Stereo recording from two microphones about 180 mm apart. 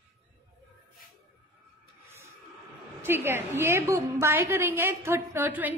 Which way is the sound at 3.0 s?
10° right (ahead or behind).